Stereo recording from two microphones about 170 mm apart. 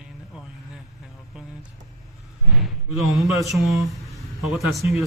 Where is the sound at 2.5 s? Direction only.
Centre (ahead or behind).